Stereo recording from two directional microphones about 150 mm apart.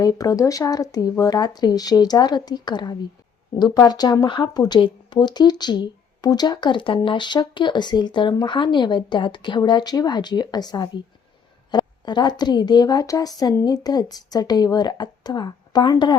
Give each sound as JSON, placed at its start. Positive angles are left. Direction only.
{"t": 0.0, "sound": "speech", "side_deg": 25}